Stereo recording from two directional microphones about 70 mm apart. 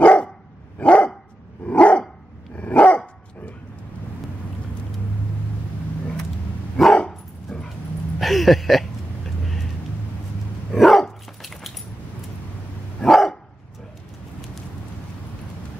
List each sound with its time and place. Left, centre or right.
0.0 s dog: centre
7.0 s dog: centre
8.2 s a sound: centre
10.7 s dog: centre
13.0 s dog: centre